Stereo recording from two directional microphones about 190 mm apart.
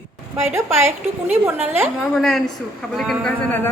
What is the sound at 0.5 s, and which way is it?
A woman's voice, 15° right (ahead or behind).